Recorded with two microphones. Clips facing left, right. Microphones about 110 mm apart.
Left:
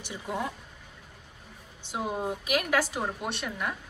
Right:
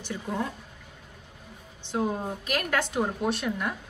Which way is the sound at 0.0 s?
15° left (ahead or behind).